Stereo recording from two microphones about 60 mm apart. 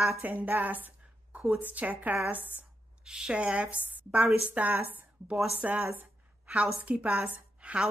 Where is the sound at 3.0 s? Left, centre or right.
Centre.